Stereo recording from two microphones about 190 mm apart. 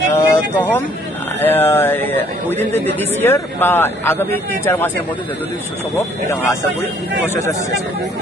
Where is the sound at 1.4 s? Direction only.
10° left (ahead or behind).